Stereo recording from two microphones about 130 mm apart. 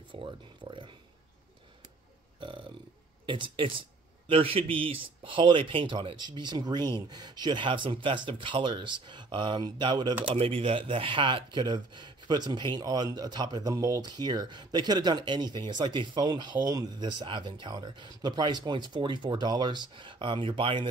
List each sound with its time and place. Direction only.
0.1 s speech: 40° right (ahead or behind)
2.4 s burping: 40° right (ahead or behind)
3.3 s speech: 40° right (ahead or behind)
10.2 s speech: 45° right (ahead or behind)